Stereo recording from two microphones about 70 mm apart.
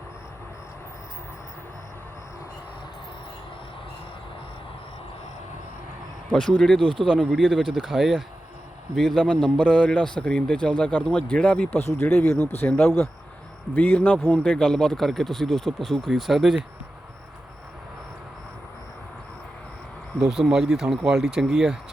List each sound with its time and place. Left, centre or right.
6.6 s a man's voice: centre
20.1 s speech: centre